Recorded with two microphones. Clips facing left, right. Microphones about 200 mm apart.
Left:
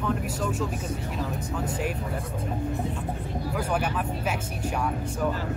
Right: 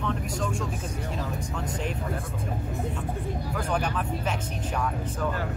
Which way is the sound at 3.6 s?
5° left (ahead or behind).